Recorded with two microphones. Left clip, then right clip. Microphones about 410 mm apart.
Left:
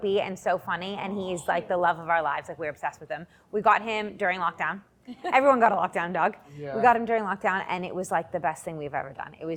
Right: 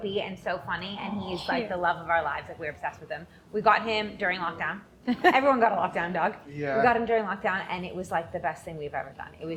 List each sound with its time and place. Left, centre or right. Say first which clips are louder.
0.0 s a woman's voice: left 5 dB; left